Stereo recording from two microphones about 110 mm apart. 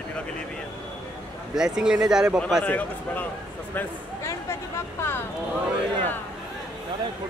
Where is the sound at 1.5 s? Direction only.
5° right (ahead or behind).